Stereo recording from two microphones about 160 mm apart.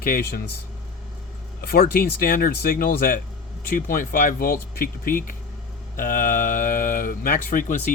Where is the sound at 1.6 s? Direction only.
70° left (ahead or behind).